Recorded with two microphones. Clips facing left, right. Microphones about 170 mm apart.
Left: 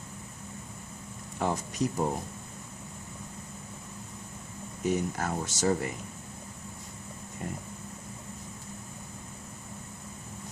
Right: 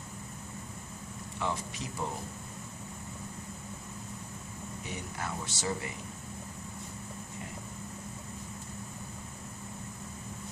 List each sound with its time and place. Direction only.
1.4 s speech: 45° left (ahead or behind)
4.9 s speech: 45° left (ahead or behind)